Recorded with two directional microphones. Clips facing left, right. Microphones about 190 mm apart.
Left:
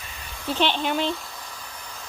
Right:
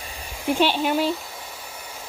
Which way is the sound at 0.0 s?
30° right (ahead or behind).